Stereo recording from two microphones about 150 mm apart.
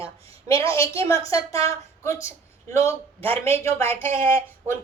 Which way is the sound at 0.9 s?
20° left (ahead or behind).